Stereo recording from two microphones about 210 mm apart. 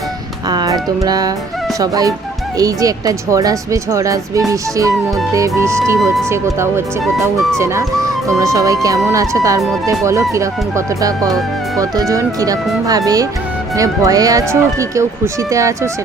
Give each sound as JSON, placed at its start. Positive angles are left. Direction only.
{"t": 0.4, "sound": "music", "side_deg": -20}
{"t": 1.8, "sound": "speech", "side_deg": -15}
{"t": 7.0, "sound": "speech", "side_deg": 0}
{"t": 7.6, "sound": "speech", "side_deg": -15}